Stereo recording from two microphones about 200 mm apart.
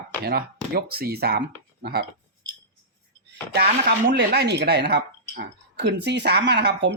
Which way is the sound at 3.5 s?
55° right (ahead or behind).